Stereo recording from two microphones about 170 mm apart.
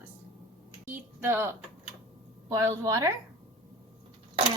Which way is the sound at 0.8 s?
15° right (ahead or behind).